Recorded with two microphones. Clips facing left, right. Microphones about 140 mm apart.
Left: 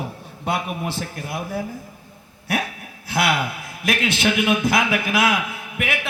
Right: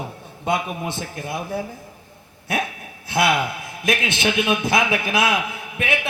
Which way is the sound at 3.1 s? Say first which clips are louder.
Right 2 dB; 20° right (ahead or behind).